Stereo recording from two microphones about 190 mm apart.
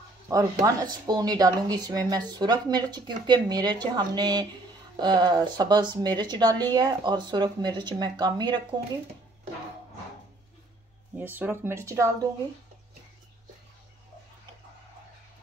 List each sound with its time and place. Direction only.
0.3 s speech: 20° right (ahead or behind)
11.1 s speech: 10° right (ahead or behind)